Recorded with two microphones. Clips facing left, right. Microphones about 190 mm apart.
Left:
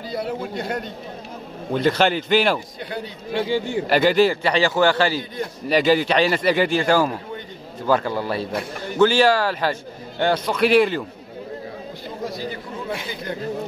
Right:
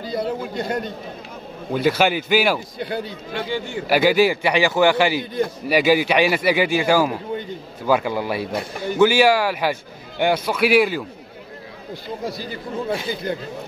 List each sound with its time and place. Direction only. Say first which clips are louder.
0.1 s a man's voice: right 2 dB; 5° left (ahead or behind)
3.3 s a man's voice: left 4 dB; 35° left (ahead or behind)
3.8 s a man's voice: right 1 dB; 5° right (ahead or behind)